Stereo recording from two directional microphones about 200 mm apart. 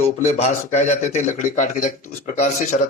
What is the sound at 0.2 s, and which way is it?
Speech, 35° left (ahead or behind).